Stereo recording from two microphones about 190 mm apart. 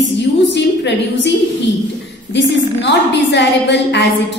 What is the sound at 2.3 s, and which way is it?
A woman's voice, 70° left (ahead or behind).